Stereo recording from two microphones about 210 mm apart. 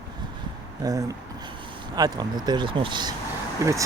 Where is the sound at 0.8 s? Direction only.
15° right (ahead or behind).